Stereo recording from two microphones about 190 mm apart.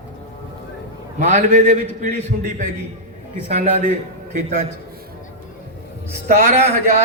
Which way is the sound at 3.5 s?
35° right (ahead or behind).